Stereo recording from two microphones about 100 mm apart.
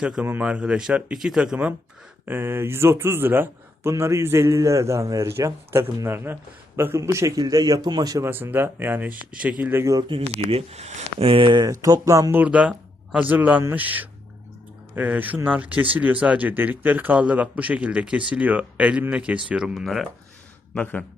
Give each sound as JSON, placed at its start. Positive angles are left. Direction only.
{"t": 0.0, "sound": "speech", "side_deg": -10}
{"t": 2.2, "sound": "a man's voice", "side_deg": -20}
{"t": 8.2, "sound": "speech", "side_deg": -20}
{"t": 9.7, "sound": "a man's voice", "side_deg": -30}
{"t": 10.2, "sound": "speech", "side_deg": -90}
{"t": 11.6, "sound": "a man's voice", "side_deg": -35}
{"t": 12.4, "sound": "speech", "side_deg": -15}
{"t": 20.7, "sound": "a man's voice", "side_deg": 15}